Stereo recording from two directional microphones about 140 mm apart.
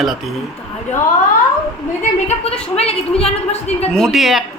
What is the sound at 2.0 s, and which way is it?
Speech, 50° left (ahead or behind).